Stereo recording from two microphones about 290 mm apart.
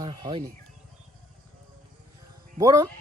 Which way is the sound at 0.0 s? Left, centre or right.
Centre.